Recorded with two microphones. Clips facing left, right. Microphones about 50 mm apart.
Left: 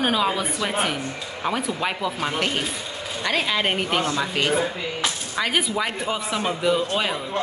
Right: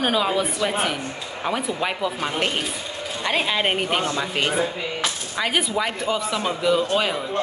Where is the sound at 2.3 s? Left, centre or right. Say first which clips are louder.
Even; centre.